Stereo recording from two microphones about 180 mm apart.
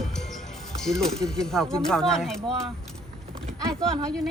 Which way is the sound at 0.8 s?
Centre (ahead or behind).